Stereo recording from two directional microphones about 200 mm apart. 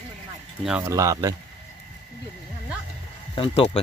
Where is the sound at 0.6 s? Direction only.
5° right (ahead or behind).